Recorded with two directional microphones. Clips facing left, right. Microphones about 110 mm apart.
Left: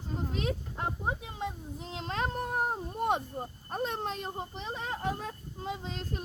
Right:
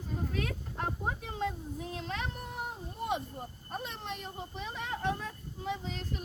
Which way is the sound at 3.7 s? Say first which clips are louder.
Left 6 dB; 45° left (ahead or behind).